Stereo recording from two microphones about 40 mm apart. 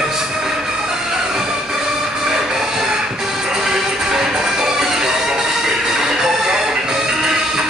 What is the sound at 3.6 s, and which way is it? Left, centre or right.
Music, centre.